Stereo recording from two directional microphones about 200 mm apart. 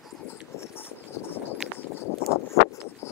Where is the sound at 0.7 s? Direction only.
10° left (ahead or behind).